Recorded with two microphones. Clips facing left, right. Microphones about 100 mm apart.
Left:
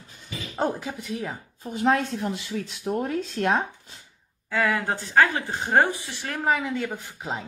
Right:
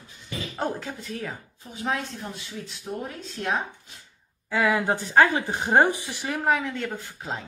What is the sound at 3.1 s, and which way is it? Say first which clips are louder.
Speech: left 5 dB; 55° left (ahead or behind).